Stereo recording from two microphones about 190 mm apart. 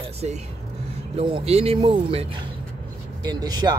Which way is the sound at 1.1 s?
30° right (ahead or behind).